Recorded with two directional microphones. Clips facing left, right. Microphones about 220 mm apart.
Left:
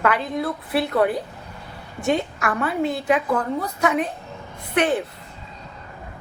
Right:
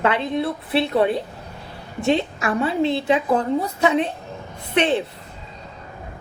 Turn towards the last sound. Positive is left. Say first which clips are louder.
# right 1 dB
turn(degrees=-25)  # may be behind; listen again after turning